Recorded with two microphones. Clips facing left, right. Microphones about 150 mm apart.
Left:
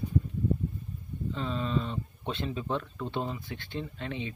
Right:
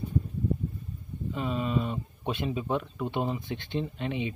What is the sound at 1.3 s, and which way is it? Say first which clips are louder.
Speech: right 2 dB; 15° right (ahead or behind).